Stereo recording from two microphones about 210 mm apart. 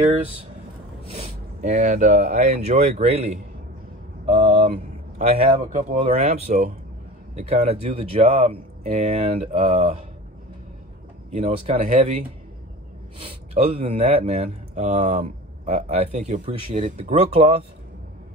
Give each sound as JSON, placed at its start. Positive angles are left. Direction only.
{"t": 1.1, "sound": "speech", "side_deg": -35}
{"t": 4.3, "sound": "a sound", "side_deg": -35}
{"t": 5.4, "sound": "speech", "side_deg": -35}
{"t": 11.3, "sound": "speech", "side_deg": -30}
{"t": 13.2, "sound": "speech", "side_deg": -25}